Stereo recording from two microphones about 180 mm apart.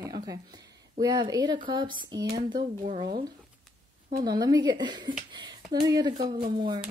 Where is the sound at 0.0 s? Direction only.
20° right (ahead or behind).